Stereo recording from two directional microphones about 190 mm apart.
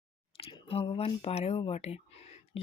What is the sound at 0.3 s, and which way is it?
Speech, 30° left (ahead or behind).